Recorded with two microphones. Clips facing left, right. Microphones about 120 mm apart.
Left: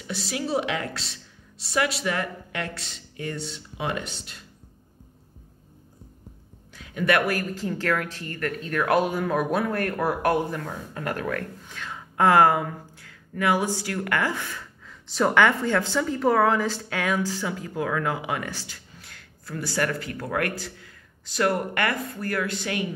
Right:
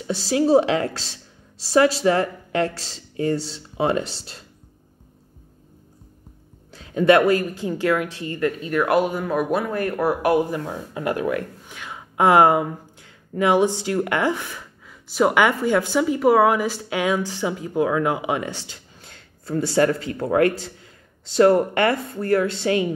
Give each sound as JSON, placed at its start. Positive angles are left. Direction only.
{"t": 0.0, "sound": "speech", "side_deg": -35}
{"t": 6.7, "sound": "a woman's voice", "side_deg": -30}